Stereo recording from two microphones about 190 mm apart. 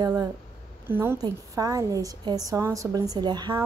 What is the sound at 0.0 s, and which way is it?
A woman's voice, 20° right (ahead or behind).